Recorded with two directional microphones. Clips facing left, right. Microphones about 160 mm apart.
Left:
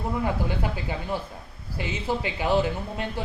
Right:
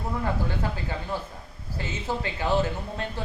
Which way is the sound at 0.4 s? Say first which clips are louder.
Left 1 dB; 15° left (ahead or behind).